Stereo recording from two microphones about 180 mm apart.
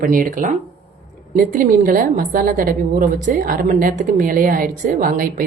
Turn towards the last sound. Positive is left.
turn(degrees=-50)  # may be behind; listen again after turning